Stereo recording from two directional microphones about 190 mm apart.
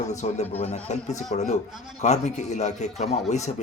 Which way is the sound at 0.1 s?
35° left (ahead or behind).